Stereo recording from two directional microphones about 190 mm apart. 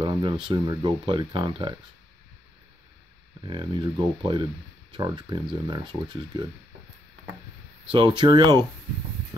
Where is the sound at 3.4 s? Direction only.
25° right (ahead or behind).